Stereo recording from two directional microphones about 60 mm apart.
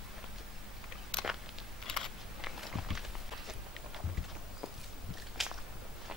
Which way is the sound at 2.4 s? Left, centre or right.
Centre.